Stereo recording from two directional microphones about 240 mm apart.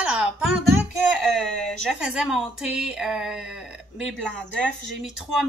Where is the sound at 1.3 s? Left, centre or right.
Centre.